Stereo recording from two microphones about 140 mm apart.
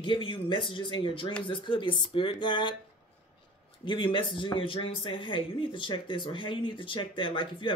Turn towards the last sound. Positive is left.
turn(degrees=35)  # may be behind; listen again after turning